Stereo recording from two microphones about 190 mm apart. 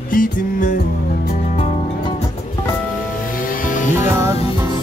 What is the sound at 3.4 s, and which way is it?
Music, 45° left (ahead or behind).